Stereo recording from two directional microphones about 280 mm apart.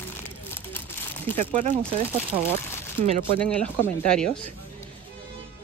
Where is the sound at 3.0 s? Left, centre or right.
Right.